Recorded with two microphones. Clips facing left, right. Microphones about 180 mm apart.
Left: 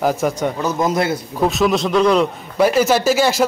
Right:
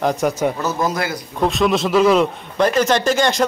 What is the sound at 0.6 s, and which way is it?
Speech, 20° left (ahead or behind).